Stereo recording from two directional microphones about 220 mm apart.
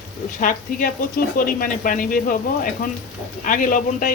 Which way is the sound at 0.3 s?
35° left (ahead or behind).